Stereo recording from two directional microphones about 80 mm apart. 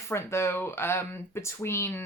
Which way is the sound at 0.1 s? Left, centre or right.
Left.